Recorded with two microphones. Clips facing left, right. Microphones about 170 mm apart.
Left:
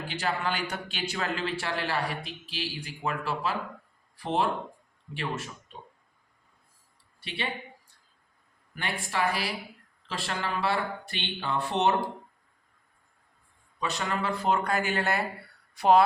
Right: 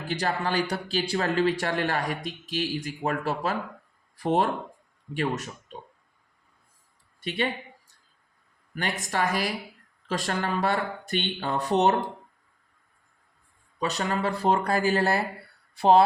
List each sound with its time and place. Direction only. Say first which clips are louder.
0.1 s a man's voice: right 4 dB; 40° right (ahead or behind)
7.2 s speech: right 8 dB; 45° right (ahead or behind)
8.7 s a man's voice: right 3 dB; 45° right (ahead or behind)
13.7 s speech: right 3 dB; 35° right (ahead or behind)